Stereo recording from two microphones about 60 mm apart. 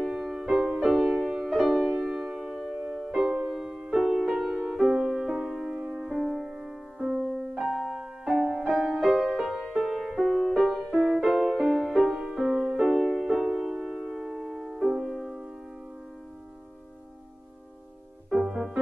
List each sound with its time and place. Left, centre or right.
0.0 s music: centre
5.8 s music: right
6.1 s music: centre
18.3 s music: centre